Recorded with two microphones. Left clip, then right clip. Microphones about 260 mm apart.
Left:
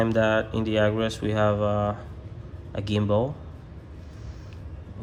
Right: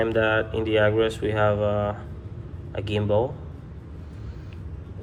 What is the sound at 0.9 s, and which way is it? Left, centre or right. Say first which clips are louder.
Speech: right 4 dB; left.